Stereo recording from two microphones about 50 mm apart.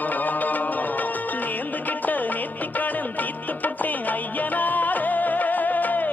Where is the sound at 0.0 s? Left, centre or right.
Left.